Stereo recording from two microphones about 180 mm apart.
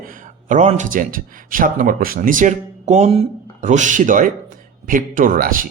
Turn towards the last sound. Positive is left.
turn(degrees=-50)  # may be behind; listen again after turning